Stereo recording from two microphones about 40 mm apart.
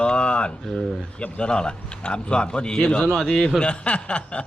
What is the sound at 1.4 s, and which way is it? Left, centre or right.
Speech, left.